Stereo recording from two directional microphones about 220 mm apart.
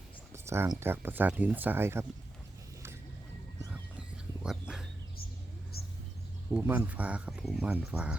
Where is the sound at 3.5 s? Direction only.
5° right (ahead or behind).